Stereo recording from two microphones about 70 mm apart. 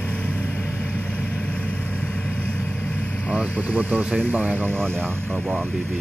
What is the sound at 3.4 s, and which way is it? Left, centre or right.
Speech, right.